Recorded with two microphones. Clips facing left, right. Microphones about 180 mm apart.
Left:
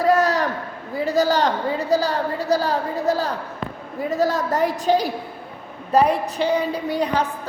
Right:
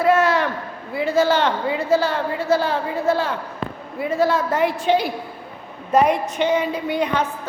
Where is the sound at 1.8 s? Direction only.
40° left (ahead or behind).